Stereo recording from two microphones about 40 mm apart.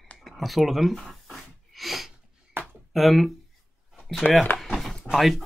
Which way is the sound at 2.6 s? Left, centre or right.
Right.